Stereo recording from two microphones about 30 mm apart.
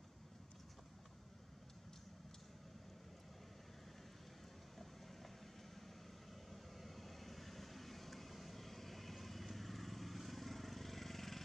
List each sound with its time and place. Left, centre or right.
4.7 s vehicle: centre
6.5 s vehicle: centre